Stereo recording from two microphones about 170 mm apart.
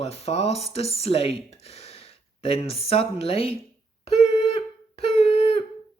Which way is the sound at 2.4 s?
35° left (ahead or behind).